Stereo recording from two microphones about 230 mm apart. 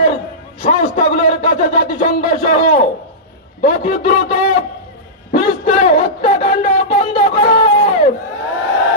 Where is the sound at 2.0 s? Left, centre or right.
Left.